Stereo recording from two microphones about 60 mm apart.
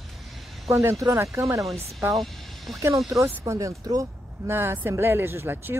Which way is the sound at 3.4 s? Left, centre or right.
Right.